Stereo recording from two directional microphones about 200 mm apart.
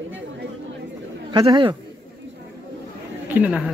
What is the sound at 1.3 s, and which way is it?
Speech, 25° right (ahead or behind).